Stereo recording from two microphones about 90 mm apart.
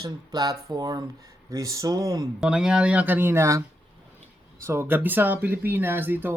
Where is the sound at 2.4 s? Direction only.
10° right (ahead or behind); by 3.6 s 30° right (ahead or behind).